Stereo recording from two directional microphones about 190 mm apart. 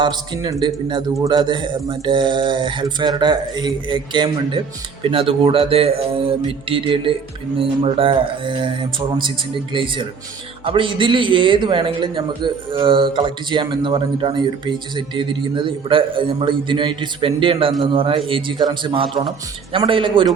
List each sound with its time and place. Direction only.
0.0 s a man's voice: 20° right (ahead or behind)